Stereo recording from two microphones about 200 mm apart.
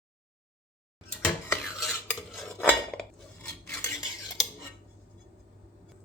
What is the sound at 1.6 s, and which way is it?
Cutlery, centre (ahead or behind).